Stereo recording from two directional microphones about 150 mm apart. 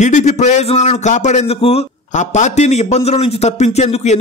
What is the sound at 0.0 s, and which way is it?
A man's voice, 50° left (ahead or behind).